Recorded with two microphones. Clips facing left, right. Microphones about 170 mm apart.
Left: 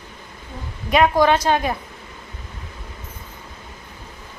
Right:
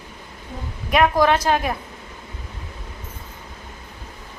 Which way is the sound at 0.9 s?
Centre (ahead or behind).